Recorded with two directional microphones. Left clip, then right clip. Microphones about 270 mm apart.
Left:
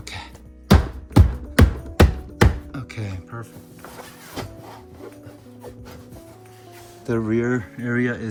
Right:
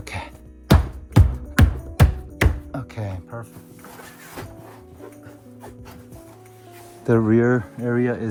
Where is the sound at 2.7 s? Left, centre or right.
Centre.